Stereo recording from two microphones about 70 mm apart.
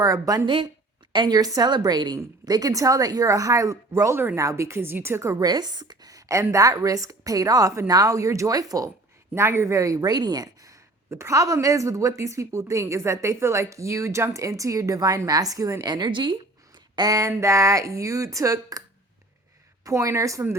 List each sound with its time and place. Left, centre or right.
0.0 s a woman's voice: right
1.2 s a woman's voice: right
2.5 s a woman's voice: right
5.4 s a woman's voice: right
9.3 s a woman's voice: right
10.1 s a woman's voice: right
16.9 s a sound: right
17.2 s a woman's voice: right
19.8 s a woman's voice: right